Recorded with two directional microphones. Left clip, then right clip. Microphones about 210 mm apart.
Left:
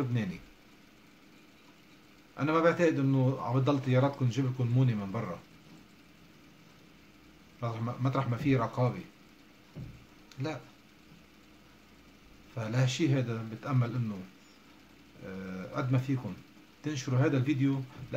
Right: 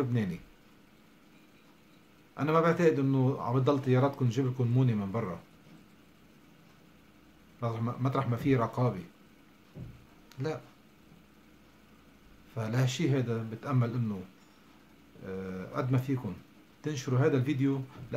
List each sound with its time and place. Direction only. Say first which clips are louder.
2.3 s a man's voice: even; 20° right (ahead or behind)
7.6 s a man's voice: right 1 dB; 20° right (ahead or behind)
10.3 s speech: right 2 dB; 20° right (ahead or behind)
12.5 s a man's voice: left 1 dB; 15° right (ahead or behind)
15.2 s a man's voice: right 3 dB; 15° right (ahead or behind)